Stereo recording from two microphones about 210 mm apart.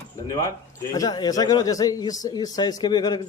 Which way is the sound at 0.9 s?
20° left (ahead or behind).